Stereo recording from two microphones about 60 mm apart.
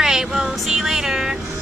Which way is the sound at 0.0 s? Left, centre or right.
Centre.